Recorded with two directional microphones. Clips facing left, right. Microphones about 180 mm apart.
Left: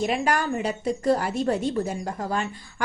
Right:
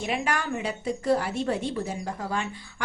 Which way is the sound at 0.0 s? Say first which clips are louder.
Left 4 dB; 40° left (ahead or behind).